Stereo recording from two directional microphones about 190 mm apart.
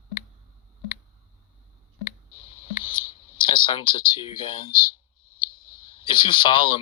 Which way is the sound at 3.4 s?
25° left (ahead or behind).